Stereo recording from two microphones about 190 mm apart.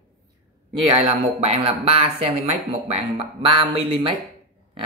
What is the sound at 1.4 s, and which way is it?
Speech, 35° right (ahead or behind).